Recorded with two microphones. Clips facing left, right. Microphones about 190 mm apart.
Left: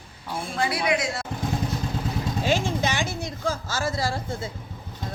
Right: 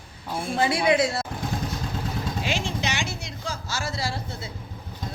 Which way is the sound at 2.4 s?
50° left (ahead or behind).